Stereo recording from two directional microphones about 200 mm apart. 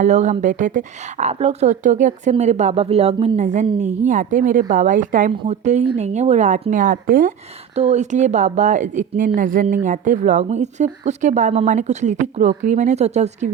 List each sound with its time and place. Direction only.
0.0 s a woman's voice: 35° right (ahead or behind)